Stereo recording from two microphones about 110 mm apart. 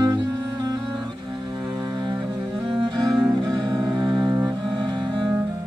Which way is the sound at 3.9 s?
40° right (ahead or behind).